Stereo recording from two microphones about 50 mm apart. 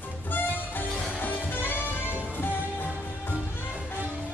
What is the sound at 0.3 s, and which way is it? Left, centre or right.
Music, left.